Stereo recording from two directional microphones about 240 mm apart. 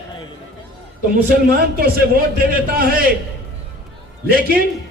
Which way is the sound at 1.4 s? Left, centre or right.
Right.